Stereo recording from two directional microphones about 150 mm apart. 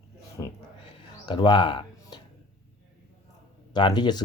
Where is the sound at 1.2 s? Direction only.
30° left (ahead or behind).